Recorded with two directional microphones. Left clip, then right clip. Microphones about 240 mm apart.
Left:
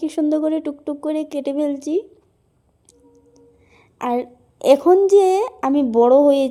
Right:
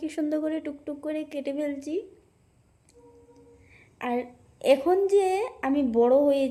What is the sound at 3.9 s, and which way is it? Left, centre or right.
A woman's voice, left.